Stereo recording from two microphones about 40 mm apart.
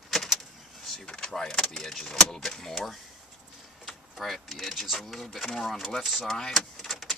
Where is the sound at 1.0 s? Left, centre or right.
Left.